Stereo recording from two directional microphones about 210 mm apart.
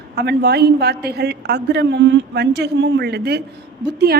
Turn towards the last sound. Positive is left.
turn(degrees=-50)  # may be behind; listen again after turning